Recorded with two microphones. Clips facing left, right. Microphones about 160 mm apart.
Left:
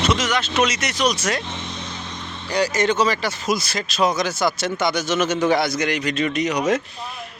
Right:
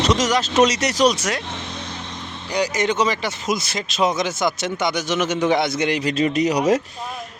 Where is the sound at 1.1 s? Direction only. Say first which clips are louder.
Left 1 dB; 15° right (ahead or behind).